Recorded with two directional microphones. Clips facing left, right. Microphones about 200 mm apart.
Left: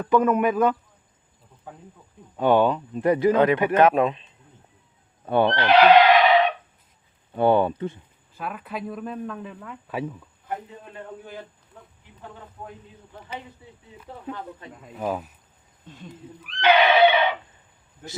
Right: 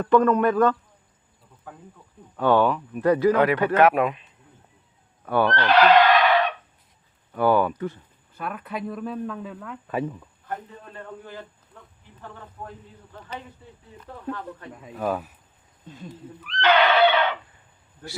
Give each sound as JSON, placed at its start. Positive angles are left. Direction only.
{"t": 0.0, "sound": "a man's voice", "side_deg": 10}
{"t": 5.2, "sound": "a sound", "side_deg": 25}
{"t": 7.3, "sound": "speech", "side_deg": 25}
{"t": 8.4, "sound": "speech", "side_deg": 0}
{"t": 10.5, "sound": "a man's voice", "side_deg": 15}
{"t": 14.7, "sound": "speech", "side_deg": 0}
{"t": 16.5, "sound": "neigh", "side_deg": 10}